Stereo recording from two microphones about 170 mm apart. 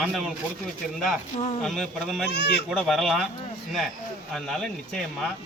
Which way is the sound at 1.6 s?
5° left (ahead or behind).